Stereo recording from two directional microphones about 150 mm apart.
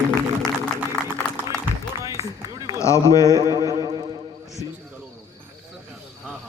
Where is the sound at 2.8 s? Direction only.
20° left (ahead or behind).